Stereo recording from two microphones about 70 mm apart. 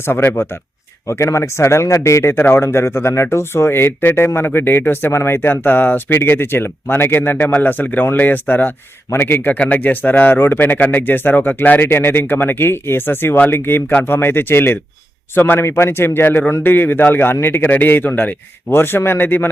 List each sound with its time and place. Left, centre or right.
0.0 s speech: left
1.0 s a man's voice: left
9.6 s speech: centre